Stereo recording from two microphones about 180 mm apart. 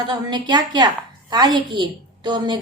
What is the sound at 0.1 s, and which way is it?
A woman's voice, 25° right (ahead or behind).